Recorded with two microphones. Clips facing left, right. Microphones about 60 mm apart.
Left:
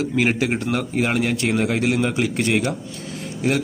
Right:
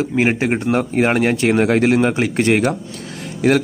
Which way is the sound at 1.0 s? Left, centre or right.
Right.